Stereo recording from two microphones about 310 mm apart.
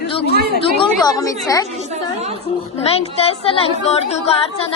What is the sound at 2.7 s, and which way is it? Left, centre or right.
Speech, centre.